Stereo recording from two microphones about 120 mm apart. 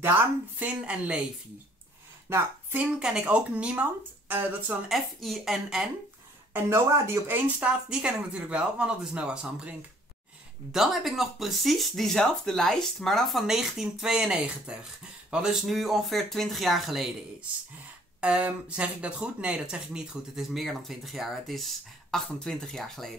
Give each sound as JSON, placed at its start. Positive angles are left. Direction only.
{"t": 0.0, "sound": "speech", "side_deg": -15}
{"t": 2.2, "sound": "a woman's voice", "side_deg": -20}
{"t": 3.0, "sound": "speech", "side_deg": -5}
{"t": 4.8, "sound": "speech", "side_deg": 0}
{"t": 6.5, "sound": "speech", "side_deg": -20}